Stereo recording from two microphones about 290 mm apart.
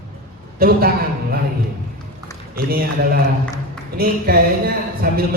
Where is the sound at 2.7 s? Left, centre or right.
Right.